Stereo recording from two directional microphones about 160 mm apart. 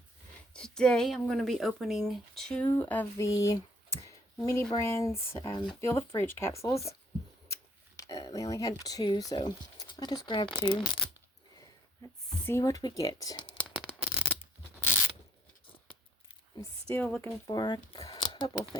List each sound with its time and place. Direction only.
0.5 s speech: 5° left (ahead or behind)
7.9 s speech: 20° left (ahead or behind)
12.5 s speech: 20° left (ahead or behind)
13.7 s a sound: 10° left (ahead or behind)
14.0 s shuffling cards: 5° right (ahead or behind)
15.6 s a sound: 35° left (ahead or behind)
16.9 s speech: 10° left (ahead or behind)
17.5 s speech: 25° left (ahead or behind)
18.1 s a sound: 30° left (ahead or behind)